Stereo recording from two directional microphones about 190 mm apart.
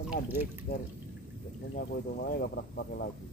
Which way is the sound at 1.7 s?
50° left (ahead or behind).